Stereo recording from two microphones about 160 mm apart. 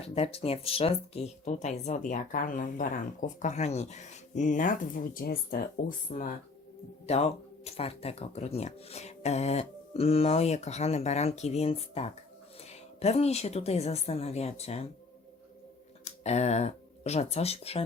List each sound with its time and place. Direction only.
0.0 s speech: 40° left (ahead or behind); by 6.3 s 55° left (ahead or behind)
7.1 s speech: 40° left (ahead or behind)
16.0 s speech: 45° left (ahead or behind)